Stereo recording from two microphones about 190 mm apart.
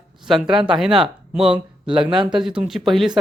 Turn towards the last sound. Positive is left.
turn(degrees=0)  # may be behind; listen again after turning